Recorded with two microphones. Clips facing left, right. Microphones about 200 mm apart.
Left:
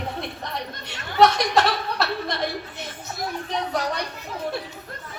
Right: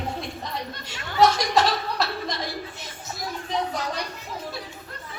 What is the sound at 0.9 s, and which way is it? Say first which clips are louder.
Speech: left 2 dB; 60° left (ahead or behind).